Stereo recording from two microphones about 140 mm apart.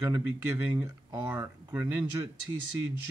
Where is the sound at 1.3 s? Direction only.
15° right (ahead or behind).